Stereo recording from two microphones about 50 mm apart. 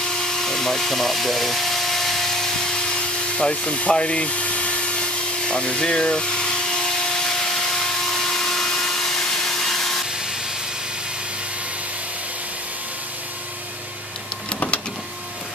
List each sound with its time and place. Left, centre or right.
0.2 s power tool: centre
3.3 s speech: left
7.7 s a sound: centre